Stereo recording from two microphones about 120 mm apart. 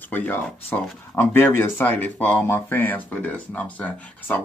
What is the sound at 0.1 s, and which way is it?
Speech, 15° left (ahead or behind).